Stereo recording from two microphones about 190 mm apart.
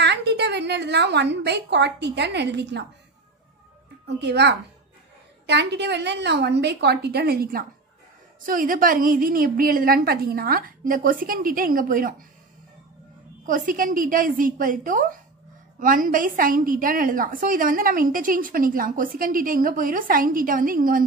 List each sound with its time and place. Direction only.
0.0 s a woman's voice: 65° right (ahead or behind)
4.2 s a woman's voice: 65° right (ahead or behind); by 12.3 s 45° right (ahead or behind)
13.5 s a woman's voice: 45° right (ahead or behind)